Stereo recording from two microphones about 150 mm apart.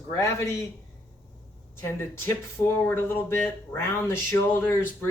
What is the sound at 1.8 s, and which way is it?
Speech, 15° left (ahead or behind).